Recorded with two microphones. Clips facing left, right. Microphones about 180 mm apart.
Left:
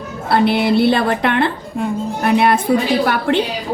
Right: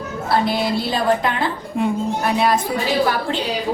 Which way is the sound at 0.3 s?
65° left (ahead or behind).